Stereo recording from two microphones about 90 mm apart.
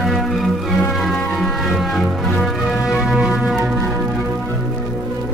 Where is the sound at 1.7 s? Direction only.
Centre (ahead or behind).